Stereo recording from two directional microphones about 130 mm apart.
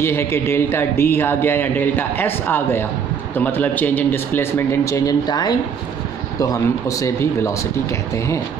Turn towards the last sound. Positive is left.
turn(degrees=25)  # may be behind; listen again after turning